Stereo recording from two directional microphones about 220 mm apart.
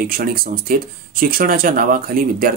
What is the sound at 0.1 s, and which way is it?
Speech, 40° right (ahead or behind).